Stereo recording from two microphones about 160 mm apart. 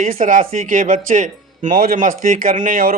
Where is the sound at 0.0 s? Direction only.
55° right (ahead or behind).